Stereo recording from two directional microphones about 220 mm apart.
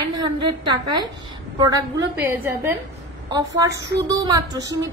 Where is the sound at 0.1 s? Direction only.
20° right (ahead or behind).